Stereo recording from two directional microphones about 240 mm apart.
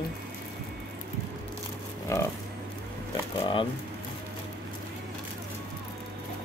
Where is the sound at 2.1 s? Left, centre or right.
Centre.